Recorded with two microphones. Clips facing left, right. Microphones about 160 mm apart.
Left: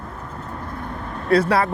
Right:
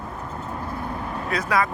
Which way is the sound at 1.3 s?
30° left (ahead or behind).